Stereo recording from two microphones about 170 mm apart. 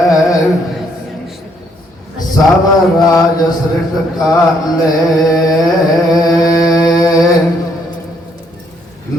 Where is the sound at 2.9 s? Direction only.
25° left (ahead or behind).